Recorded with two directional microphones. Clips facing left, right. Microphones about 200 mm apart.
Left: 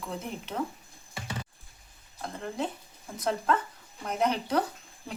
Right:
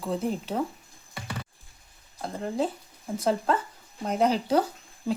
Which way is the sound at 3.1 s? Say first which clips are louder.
Right 3 dB; 30° right (ahead or behind).